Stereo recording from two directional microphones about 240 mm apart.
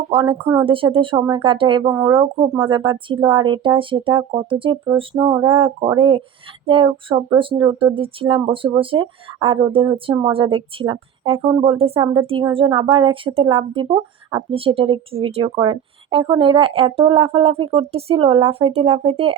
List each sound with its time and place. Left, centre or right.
0.1 s a woman's voice: centre